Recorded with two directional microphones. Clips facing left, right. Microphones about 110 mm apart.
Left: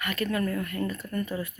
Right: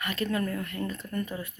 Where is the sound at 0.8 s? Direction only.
10° left (ahead or behind).